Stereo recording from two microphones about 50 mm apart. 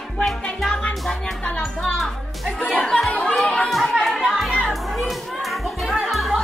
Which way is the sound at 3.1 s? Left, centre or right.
Left.